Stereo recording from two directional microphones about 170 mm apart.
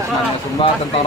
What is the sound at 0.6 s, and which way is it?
Speech, 30° left (ahead or behind).